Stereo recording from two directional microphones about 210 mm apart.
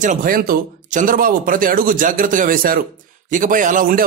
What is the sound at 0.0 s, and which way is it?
Speech, 40° right (ahead or behind).